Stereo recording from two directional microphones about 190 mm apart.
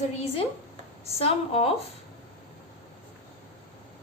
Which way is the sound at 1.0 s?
30° left (ahead or behind).